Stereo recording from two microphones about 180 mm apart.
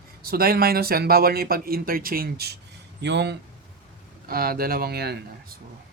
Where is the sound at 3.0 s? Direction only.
70° right (ahead or behind).